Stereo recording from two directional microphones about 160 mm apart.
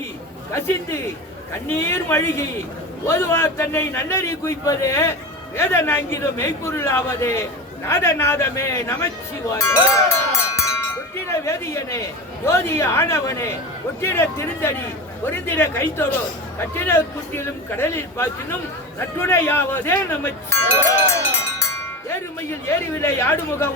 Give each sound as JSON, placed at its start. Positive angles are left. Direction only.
{"t": 0.5, "sound": "a man's voice", "side_deg": 15}
{"t": 22.1, "sound": "a man's voice", "side_deg": 15}